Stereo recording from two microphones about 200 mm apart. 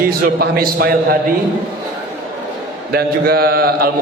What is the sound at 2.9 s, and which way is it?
A man's voice, 50° right (ahead or behind).